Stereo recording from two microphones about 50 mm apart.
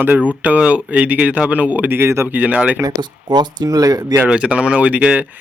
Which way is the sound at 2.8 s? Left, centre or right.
Right.